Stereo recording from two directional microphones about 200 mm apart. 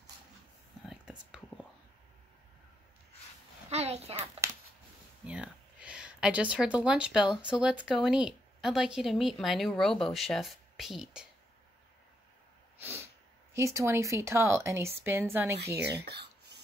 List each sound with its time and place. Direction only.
0.8 s whispering: 5° right (ahead or behind)
3.7 s a child's voice: 30° right (ahead or behind)
4.4 s a sound: 15° right (ahead or behind)
5.2 s speech: 5° right (ahead or behind)
12.8 s speech: 15° right (ahead or behind)
16.1 s a sound: 55° right (ahead or behind)